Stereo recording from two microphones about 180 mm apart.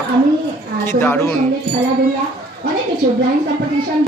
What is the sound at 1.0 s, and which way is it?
Speech, 10° left (ahead or behind).